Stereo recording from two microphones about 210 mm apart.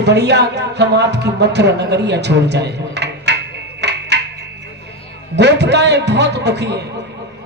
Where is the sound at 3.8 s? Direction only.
55° right (ahead or behind).